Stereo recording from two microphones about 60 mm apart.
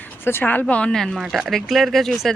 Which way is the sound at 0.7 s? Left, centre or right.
Centre.